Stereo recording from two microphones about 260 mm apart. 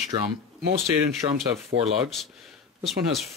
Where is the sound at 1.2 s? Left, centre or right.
Centre.